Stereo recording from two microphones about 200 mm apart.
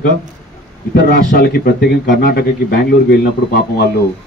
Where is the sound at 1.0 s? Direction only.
50° left (ahead or behind).